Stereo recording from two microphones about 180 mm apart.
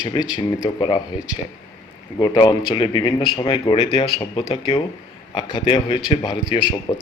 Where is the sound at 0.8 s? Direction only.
25° left (ahead or behind).